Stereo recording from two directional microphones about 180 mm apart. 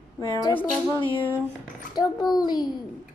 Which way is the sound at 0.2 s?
20° left (ahead or behind).